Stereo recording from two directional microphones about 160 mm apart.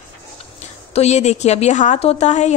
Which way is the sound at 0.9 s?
45° left (ahead or behind).